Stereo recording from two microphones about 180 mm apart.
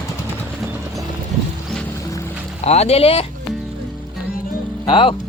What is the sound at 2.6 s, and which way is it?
Speech, 35° left (ahead or behind).